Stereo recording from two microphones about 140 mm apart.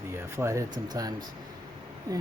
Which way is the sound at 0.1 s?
20° right (ahead or behind).